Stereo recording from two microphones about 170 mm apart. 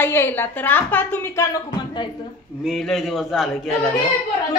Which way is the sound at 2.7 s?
Centre (ahead or behind).